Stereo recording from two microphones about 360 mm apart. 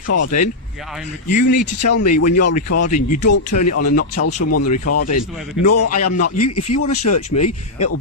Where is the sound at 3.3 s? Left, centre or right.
Left.